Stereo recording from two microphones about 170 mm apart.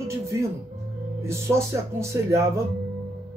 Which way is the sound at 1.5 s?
15° right (ahead or behind).